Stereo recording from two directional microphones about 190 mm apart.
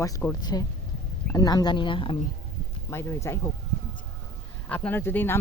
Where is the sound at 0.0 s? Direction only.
15° left (ahead or behind).